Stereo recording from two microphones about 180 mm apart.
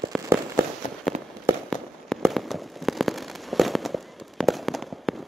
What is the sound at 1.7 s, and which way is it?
Fireworks, centre (ahead or behind).